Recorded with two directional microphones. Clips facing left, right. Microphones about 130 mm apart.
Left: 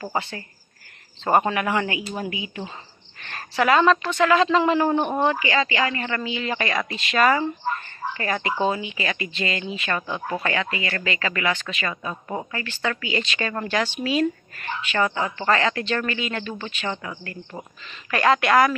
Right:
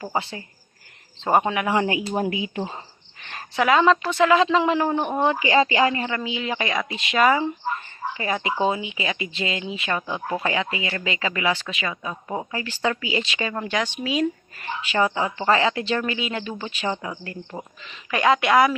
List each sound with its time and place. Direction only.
0.0 s speech: 5° right (ahead or behind)
1.7 s speech: 25° right (ahead or behind)
2.0 s speech: 35° right (ahead or behind)
3.2 s speech: 5° right (ahead or behind)
5.5 s speech: 35° right (ahead or behind)
5.8 s speech: 20° right (ahead or behind)
6.1 s speech: 10° right (ahead or behind)